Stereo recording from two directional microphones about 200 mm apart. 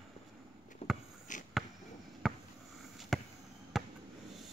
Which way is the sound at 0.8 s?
30° left (ahead or behind).